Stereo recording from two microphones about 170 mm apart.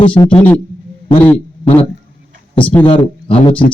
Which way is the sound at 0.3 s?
10° left (ahead or behind).